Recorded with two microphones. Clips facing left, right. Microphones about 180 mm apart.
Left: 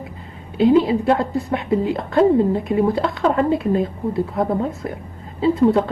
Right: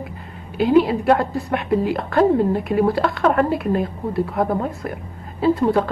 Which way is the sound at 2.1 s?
20° left (ahead or behind).